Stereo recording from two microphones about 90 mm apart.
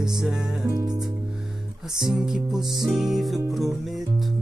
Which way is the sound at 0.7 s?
50° right (ahead or behind).